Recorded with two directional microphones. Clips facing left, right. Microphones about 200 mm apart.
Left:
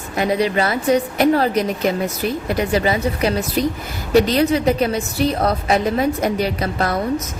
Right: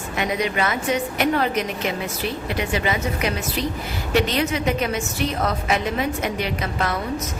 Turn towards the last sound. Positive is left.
turn(degrees=35)  # may be behind; listen again after turning